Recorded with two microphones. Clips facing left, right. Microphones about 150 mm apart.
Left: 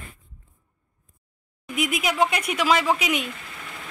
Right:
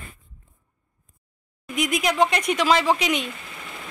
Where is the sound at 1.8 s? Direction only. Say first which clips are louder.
Right 2 dB; 5° left (ahead or behind).